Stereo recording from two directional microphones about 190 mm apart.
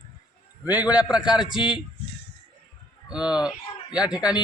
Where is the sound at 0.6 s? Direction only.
10° right (ahead or behind).